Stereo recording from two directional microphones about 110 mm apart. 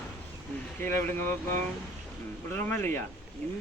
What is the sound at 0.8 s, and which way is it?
Speech, 20° left (ahead or behind).